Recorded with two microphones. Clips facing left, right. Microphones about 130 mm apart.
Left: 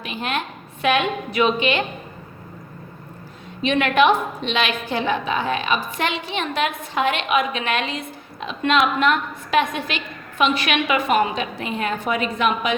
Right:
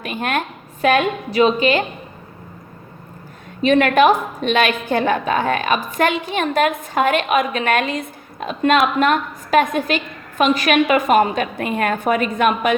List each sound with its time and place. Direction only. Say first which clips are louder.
0.0 s a woman's voice: right 4 dB; 50° right (ahead or behind)
3.6 s a woman's voice: right 4 dB; 45° right (ahead or behind)